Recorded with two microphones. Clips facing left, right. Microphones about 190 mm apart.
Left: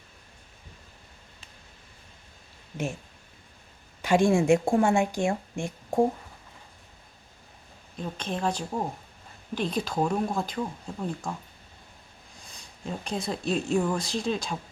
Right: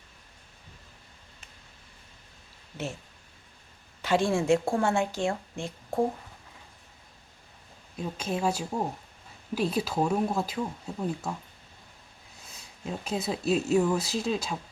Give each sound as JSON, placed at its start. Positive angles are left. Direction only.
{"t": 4.0, "sound": "speech", "side_deg": 15}
{"t": 7.9, "sound": "speech", "side_deg": -5}
{"t": 12.4, "sound": "speech", "side_deg": -5}